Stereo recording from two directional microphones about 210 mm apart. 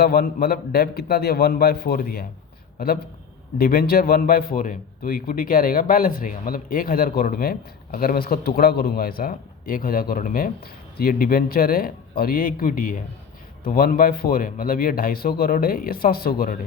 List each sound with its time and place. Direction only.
0.0 s a man's voice: 45° left (ahead or behind)